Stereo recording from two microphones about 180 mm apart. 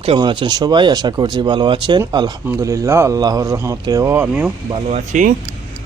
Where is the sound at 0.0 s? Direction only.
30° right (ahead or behind); by 4.5 s 10° right (ahead or behind).